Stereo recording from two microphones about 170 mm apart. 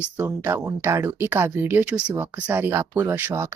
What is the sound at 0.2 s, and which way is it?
A woman's voice, 15° right (ahead or behind).